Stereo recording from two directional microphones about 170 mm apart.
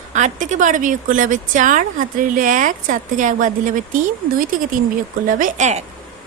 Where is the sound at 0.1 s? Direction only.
45° right (ahead or behind).